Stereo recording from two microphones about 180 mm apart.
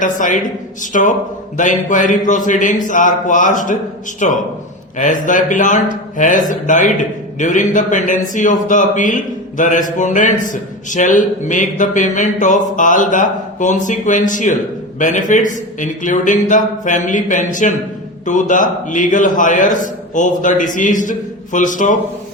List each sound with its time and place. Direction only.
0.0 s a man's voice: 45° left (ahead or behind)